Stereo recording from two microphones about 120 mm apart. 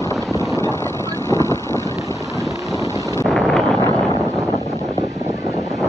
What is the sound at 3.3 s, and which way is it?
Wind noise, 5° left (ahead or behind).